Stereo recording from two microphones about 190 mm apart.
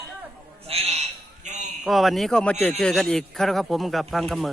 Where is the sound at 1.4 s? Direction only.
40° right (ahead or behind).